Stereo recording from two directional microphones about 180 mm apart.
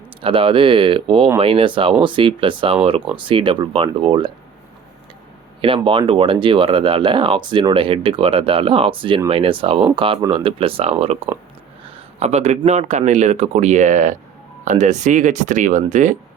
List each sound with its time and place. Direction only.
0.2 s speech: 30° right (ahead or behind)
5.6 s speech: 30° right (ahead or behind)
11.3 s speech: 10° right (ahead or behind)
12.2 s speech: 35° right (ahead or behind)